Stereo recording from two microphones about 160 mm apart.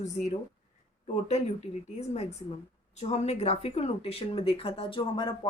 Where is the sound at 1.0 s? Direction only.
40° left (ahead or behind).